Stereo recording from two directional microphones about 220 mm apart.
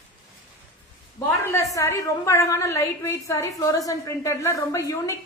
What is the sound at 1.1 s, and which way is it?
A woman's voice, 15° left (ahead or behind).